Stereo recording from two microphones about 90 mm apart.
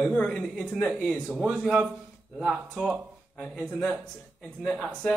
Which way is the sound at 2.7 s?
10° right (ahead or behind).